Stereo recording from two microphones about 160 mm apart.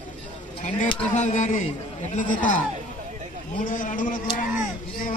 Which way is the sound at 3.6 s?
55° left (ahead or behind).